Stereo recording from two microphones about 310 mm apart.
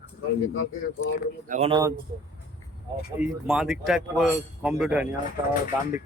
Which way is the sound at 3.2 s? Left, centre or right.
Centre.